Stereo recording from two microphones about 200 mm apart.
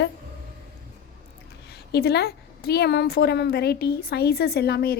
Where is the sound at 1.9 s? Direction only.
55° left (ahead or behind).